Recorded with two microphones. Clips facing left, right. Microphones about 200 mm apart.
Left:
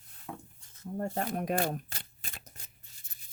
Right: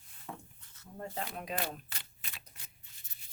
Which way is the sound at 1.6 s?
40° left (ahead or behind).